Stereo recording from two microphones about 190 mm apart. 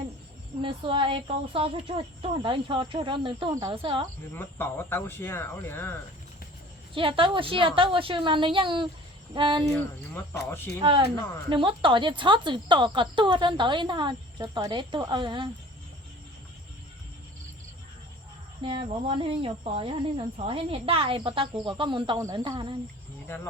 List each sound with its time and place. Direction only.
0.6 s speech: 25° right (ahead or behind)
4.4 s speech: 10° left (ahead or behind)
6.9 s speech: 25° right (ahead or behind)
9.7 s speech: 10° left (ahead or behind)
10.8 s speech: 30° right (ahead or behind)
18.6 s speech: 25° right (ahead or behind)